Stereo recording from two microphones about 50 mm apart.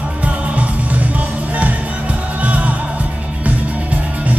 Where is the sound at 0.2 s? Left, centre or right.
Right.